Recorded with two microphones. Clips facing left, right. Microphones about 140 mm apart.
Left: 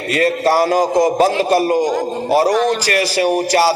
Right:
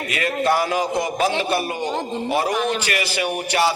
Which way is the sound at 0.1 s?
35° left (ahead or behind).